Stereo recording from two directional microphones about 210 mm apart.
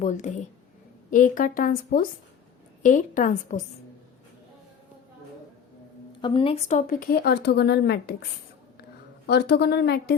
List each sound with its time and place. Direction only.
0.0 s a woman's voice: 35° left (ahead or behind)
6.2 s a woman's voice: 25° left (ahead or behind); by 8.1 s 50° left (ahead or behind)
9.2 s a woman's voice: 50° left (ahead or behind)